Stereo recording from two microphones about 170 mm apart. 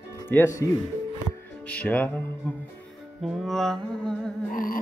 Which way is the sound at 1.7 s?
10° left (ahead or behind).